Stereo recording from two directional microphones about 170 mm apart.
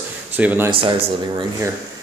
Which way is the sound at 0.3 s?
10° right (ahead or behind).